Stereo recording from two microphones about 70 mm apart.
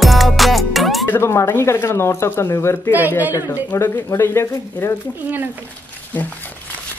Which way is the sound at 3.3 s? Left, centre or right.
Right.